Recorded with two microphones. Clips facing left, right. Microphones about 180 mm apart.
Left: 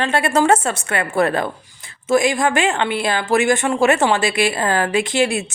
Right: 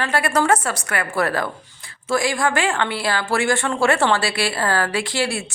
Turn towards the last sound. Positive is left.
turn(degrees=20)  # may be behind; listen again after turning